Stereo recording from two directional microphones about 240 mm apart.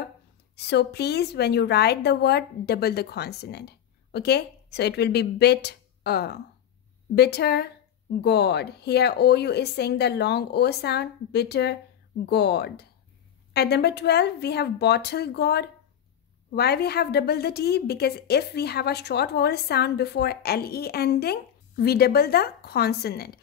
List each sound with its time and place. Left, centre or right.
0.6 s a woman's voice: left